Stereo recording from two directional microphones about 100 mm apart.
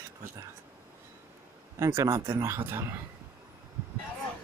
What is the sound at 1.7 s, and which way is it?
Speech, 30° right (ahead or behind).